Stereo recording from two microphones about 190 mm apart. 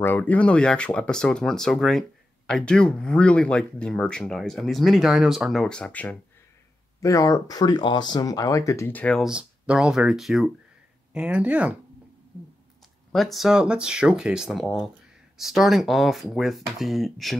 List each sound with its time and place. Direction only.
0.0 s speech: 10° left (ahead or behind); by 11.7 s 5° right (ahead or behind)
13.1 s speech: centre (ahead or behind)